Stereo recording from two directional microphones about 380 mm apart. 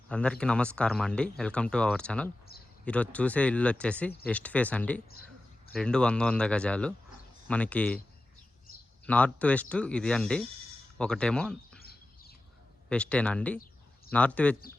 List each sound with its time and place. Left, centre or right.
0.1 s speech: centre
9.0 s speech: centre
11.8 s bird: left
12.9 s speech: centre